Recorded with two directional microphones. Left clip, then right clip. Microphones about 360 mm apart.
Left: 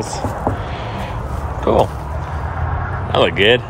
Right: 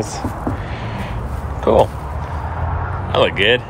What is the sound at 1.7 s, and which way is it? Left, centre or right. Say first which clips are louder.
Speech: right 2 dB; centre.